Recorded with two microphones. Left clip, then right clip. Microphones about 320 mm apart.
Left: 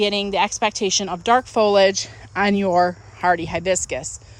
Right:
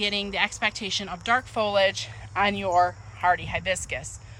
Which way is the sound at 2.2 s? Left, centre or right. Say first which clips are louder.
Left 3 dB; left.